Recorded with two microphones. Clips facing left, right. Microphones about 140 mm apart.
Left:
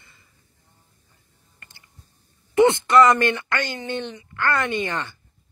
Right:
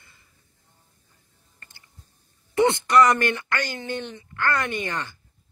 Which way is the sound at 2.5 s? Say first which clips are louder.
Left 3 dB; 20° left (ahead or behind).